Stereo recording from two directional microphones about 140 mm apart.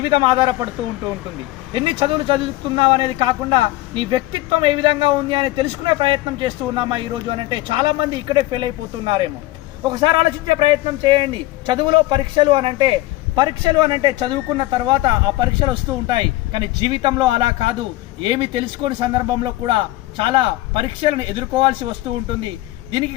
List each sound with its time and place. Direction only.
0.0 s speech: 35° right (ahead or behind)
1.7 s speech: 35° right (ahead or behind)